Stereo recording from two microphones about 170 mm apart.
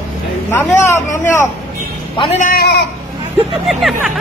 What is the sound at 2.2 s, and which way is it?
Speech, 40° left (ahead or behind).